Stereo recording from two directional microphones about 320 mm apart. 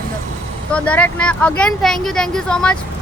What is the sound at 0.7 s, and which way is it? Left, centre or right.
Speech, centre.